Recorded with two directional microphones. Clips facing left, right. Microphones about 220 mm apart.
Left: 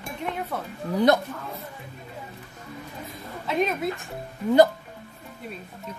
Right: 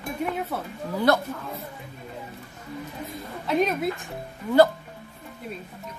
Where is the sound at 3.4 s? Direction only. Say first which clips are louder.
Right 2 dB; centre (ahead or behind).